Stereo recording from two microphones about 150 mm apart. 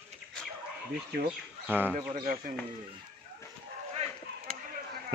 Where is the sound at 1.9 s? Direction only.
60° right (ahead or behind).